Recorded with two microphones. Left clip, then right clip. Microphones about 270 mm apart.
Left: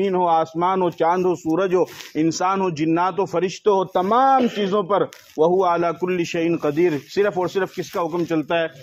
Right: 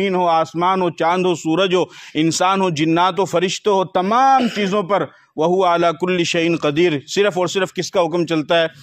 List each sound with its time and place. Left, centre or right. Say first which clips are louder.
0.0 s a man's voice: right 2 dB; right
1.4 s a man's voice: right 3 dB; right